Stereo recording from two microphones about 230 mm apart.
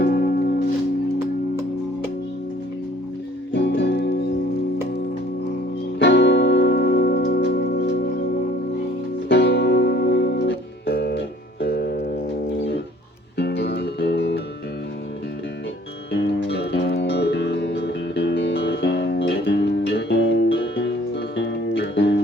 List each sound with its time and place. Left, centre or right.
0.0 s music: left
3.5 s music: left
6.0 s music: left
9.3 s music: left
13.3 s music: left
16.1 s music: left